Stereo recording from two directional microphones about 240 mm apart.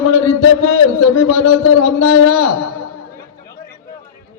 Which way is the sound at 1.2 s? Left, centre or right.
Left.